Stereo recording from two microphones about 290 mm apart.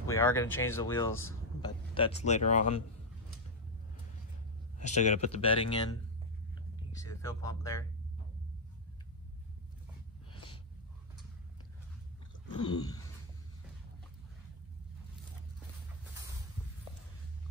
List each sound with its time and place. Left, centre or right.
0.2 s speech: centre
1.6 s a man's voice: centre
4.7 s speech: left
7.2 s speech: centre
10.3 s snort: centre
12.5 s speech: centre